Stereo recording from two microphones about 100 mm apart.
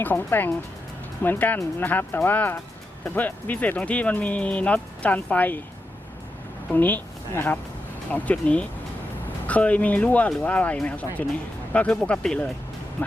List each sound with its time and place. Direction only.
0.0 s speech: 20° left (ahead or behind)
6.7 s speech: 15° left (ahead or behind)